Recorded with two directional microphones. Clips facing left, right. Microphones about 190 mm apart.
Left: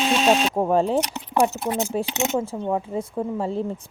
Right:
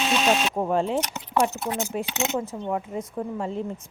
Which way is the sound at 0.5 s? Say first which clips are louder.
Left 4 dB; 40° left (ahead or behind).